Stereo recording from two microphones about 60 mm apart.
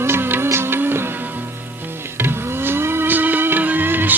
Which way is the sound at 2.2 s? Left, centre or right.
Right.